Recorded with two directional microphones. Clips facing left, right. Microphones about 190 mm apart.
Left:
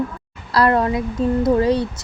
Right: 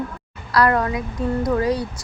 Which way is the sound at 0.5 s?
25° left (ahead or behind).